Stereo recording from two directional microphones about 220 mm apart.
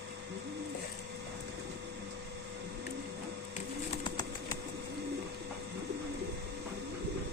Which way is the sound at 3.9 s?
20° left (ahead or behind).